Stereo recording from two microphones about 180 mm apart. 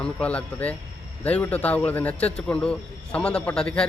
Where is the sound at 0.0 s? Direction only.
5° left (ahead or behind).